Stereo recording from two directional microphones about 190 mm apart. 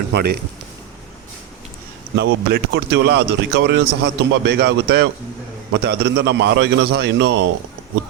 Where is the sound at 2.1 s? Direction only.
65° right (ahead or behind).